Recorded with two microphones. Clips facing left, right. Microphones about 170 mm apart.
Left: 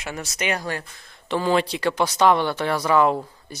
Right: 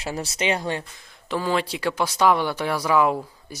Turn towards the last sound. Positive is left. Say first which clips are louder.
# left 1 dB
turn(degrees=-5)  # may be behind; listen again after turning